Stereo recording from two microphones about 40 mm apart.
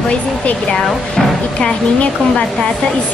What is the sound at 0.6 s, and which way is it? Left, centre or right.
Speech, centre.